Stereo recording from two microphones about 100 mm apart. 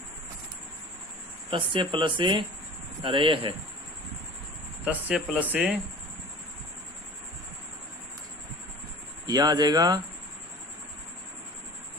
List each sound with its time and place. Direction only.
1.5 s speech: 60° right (ahead or behind)
4.9 s speech: 10° right (ahead or behind)
9.2 s speech: 40° right (ahead or behind)